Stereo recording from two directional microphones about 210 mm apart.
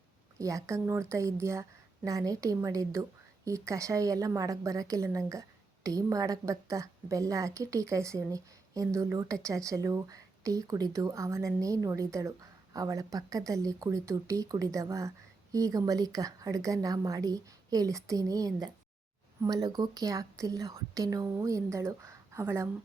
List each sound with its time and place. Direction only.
0.3 s a woman's voice: 15° right (ahead or behind)